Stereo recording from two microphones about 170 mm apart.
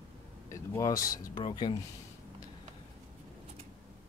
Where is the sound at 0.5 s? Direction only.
20° left (ahead or behind).